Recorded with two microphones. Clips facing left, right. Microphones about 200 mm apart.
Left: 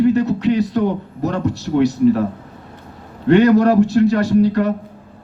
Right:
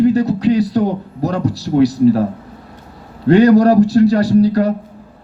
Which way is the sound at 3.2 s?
35° right (ahead or behind).